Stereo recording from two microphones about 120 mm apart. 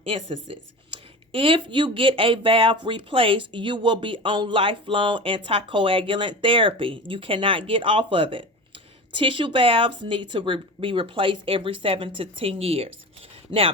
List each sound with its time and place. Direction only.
0.0 s speech: 50° right (ahead or behind)